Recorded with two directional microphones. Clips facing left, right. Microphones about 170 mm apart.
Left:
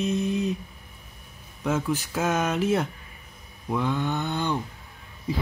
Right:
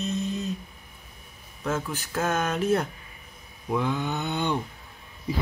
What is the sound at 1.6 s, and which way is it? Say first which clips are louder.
Speech: left 4 dB; 5° left (ahead or behind).